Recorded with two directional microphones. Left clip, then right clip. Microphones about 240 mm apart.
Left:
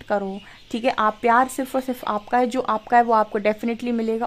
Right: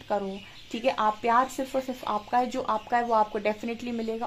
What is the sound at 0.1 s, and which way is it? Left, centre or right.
Speech, left.